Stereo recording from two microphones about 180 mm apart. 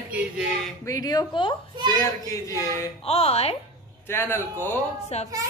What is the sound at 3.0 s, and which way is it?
Speech, 35° left (ahead or behind).